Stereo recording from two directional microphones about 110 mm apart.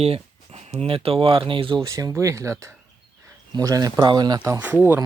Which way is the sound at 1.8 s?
30° right (ahead or behind).